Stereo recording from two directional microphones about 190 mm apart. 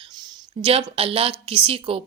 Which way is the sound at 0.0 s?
20° right (ahead or behind).